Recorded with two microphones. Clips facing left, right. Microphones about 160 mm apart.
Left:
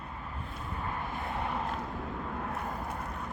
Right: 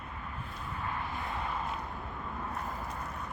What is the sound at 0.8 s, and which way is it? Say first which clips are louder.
Vehicle: left 1 dB; 50° left (ahead or behind).